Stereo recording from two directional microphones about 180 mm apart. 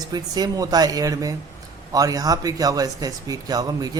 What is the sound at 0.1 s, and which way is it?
A man's voice, 20° right (ahead or behind).